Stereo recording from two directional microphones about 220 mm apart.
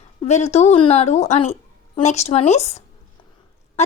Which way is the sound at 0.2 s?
30° left (ahead or behind).